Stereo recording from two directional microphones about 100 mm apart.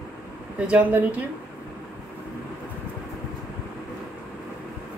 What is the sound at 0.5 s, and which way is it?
Speech, 15° right (ahead or behind).